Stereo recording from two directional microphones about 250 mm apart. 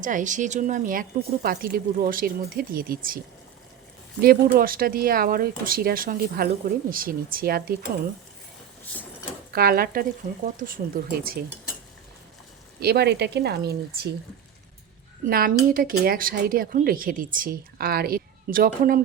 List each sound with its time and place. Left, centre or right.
0.0 s speech: right
4.2 s speech: right
9.5 s speech: right
12.8 s speech: right
15.3 s speech: right